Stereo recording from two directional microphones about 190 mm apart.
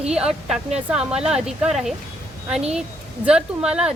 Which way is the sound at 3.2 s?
5° right (ahead or behind).